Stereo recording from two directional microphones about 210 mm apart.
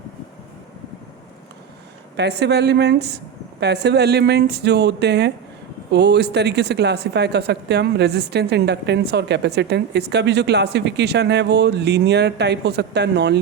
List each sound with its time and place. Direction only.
2.1 s speech: 55° right (ahead or behind)